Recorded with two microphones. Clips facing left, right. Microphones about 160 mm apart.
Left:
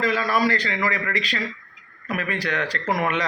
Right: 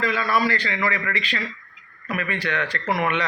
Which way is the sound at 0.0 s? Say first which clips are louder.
Left 1 dB; 40° left (ahead or behind).